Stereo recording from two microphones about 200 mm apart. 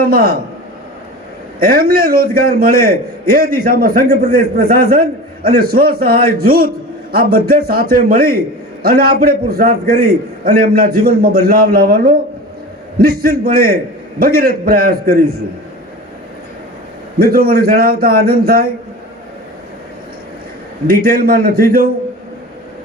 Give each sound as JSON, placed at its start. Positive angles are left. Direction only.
{"t": 0.0, "sound": "a man's voice", "side_deg": -45}
{"t": 1.5, "sound": "a man's voice", "side_deg": -45}
{"t": 17.2, "sound": "a man's voice", "side_deg": -50}
{"t": 20.8, "sound": "a man's voice", "side_deg": -50}